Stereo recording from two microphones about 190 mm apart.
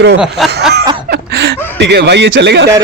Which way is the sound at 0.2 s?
Centre (ahead or behind).